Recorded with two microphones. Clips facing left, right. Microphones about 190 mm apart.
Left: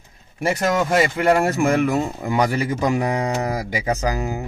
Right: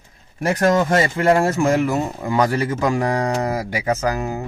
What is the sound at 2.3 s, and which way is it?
Speech, 10° left (ahead or behind).